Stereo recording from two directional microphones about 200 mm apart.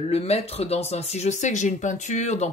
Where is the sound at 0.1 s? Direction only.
30° left (ahead or behind).